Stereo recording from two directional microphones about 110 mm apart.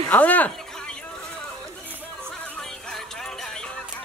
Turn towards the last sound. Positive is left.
turn(degrees=5)  # may be behind; listen again after turning